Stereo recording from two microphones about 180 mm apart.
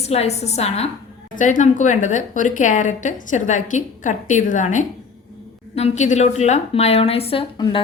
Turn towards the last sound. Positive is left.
turn(degrees=25)  # may be behind; listen again after turning